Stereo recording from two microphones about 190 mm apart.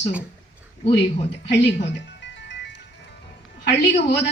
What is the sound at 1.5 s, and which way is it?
Music, 70° left (ahead or behind).